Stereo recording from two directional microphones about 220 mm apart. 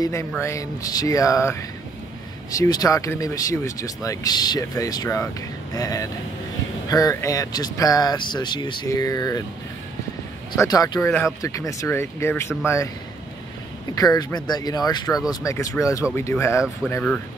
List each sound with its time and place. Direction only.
0.0 s speech: 15° left (ahead or behind)
10.6 s speech: 15° left (ahead or behind)
13.9 s speech: 15° left (ahead or behind)